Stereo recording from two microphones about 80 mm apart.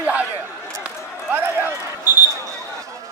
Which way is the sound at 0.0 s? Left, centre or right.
Centre.